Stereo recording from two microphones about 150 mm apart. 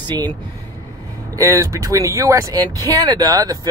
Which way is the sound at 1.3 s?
20° right (ahead or behind).